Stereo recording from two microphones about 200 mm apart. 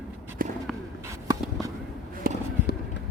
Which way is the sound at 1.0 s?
15° right (ahead or behind).